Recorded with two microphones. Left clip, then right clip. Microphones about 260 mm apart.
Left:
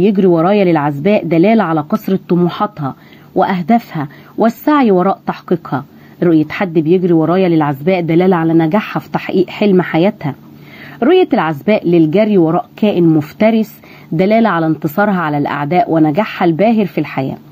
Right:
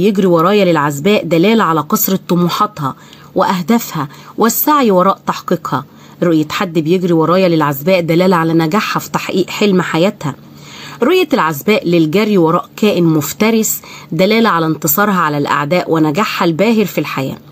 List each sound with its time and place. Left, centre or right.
0.0 s speech: right
6.8 s speech: centre
7.2 s speech: right
14.1 s speech: right